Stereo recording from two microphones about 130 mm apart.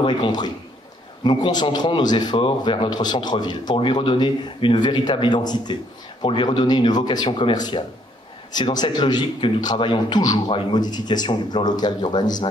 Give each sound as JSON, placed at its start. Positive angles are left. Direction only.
{"t": 0.0, "sound": "a man's voice", "side_deg": 35}